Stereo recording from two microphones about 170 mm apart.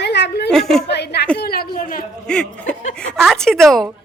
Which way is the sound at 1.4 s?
60° left (ahead or behind).